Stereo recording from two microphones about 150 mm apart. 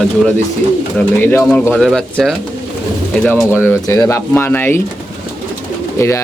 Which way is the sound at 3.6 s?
20° left (ahead or behind).